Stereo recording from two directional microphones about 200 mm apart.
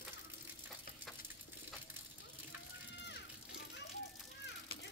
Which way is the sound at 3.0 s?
60° left (ahead or behind).